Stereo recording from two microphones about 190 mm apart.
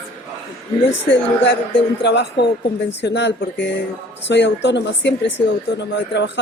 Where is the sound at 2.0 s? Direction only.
65° left (ahead or behind).